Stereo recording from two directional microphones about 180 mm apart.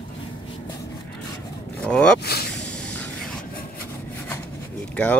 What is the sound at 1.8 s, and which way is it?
Speech, 5° left (ahead or behind).